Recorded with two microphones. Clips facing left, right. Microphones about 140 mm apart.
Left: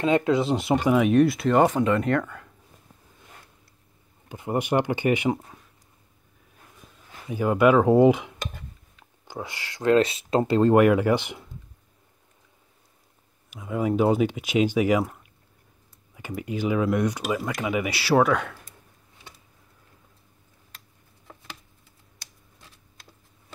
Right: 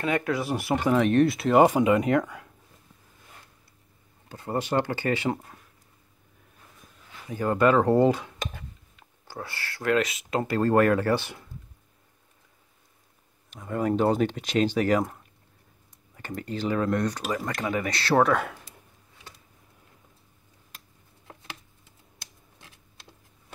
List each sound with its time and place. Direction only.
0.0 s speech: 25° left (ahead or behind); by 2.5 s 5° right (ahead or behind)
4.3 s speech: 15° left (ahead or behind)
7.2 s speech: 10° left (ahead or behind)
9.3 s speech: 15° left (ahead or behind)
13.5 s speech: 5° left (ahead or behind)
16.2 s speech: 10° left (ahead or behind)